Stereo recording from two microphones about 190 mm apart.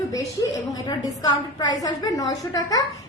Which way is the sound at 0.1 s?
20° left (ahead or behind).